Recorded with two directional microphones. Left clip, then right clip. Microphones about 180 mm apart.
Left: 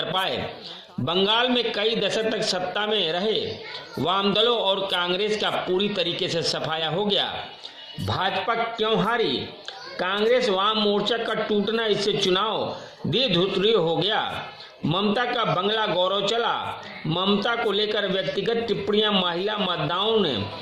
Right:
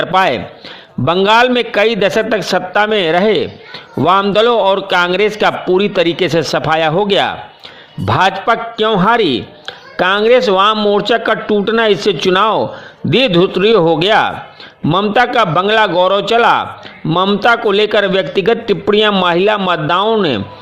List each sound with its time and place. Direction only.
0.1 s a man's voice: 40° right (ahead or behind)